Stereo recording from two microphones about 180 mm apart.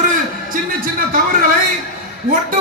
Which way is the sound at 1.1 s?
50° right (ahead or behind).